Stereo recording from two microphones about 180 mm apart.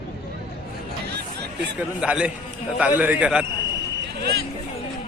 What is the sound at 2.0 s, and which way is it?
A man's voice, 5° right (ahead or behind).